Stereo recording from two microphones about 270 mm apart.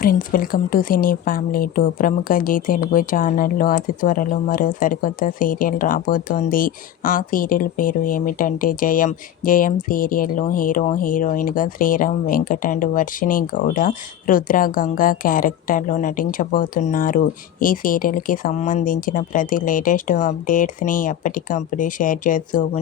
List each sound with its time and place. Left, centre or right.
0.0 s speech: left